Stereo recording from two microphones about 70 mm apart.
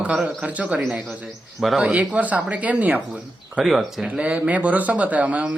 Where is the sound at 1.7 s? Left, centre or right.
Centre.